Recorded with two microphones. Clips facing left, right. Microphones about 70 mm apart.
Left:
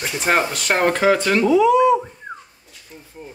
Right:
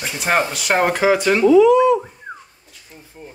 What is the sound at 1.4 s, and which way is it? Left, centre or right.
Speech, centre.